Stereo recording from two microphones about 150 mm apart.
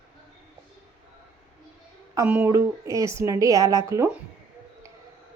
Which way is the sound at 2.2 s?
15° right (ahead or behind).